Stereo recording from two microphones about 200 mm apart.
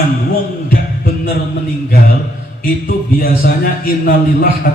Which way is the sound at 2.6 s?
45° left (ahead or behind).